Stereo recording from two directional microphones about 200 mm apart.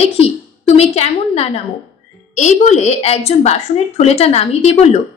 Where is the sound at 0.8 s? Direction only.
30° left (ahead or behind).